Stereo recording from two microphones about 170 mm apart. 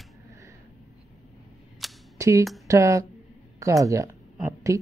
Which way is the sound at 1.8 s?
Centre (ahead or behind).